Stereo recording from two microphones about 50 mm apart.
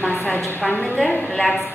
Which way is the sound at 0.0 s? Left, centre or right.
Left.